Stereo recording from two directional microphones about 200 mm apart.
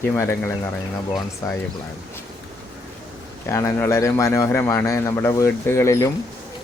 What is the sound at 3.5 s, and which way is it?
A man's voice, 15° left (ahead or behind).